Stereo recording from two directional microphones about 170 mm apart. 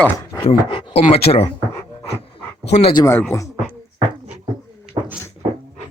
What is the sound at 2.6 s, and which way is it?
Speech, 40° left (ahead or behind).